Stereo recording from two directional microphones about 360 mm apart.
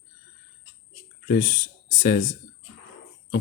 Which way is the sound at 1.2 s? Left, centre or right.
Left.